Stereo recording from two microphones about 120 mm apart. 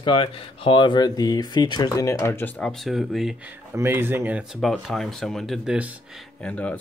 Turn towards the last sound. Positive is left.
turn(degrees=10)  # may be behind; listen again after turning